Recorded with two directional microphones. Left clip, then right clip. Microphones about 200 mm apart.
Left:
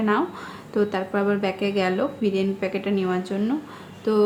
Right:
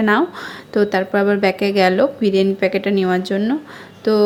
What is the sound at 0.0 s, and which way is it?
A woman's voice, 30° right (ahead or behind).